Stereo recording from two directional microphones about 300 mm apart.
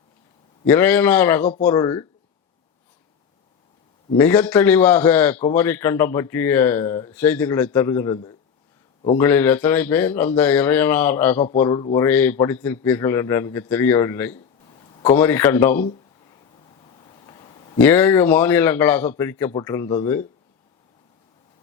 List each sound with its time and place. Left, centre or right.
0.6 s speech: centre
4.2 s speech: centre
17.0 s a sound: centre
17.7 s speech: centre